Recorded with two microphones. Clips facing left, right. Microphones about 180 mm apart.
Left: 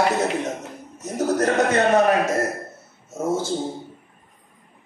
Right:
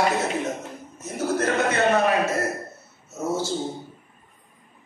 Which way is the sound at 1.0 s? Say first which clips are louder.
Left 3 dB; 40° left (ahead or behind).